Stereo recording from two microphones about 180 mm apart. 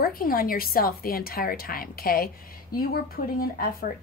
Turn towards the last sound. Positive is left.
turn(degrees=55)  # may be behind; listen again after turning